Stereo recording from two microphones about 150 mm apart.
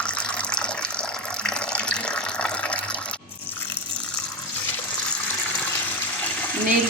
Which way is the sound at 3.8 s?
35° right (ahead or behind).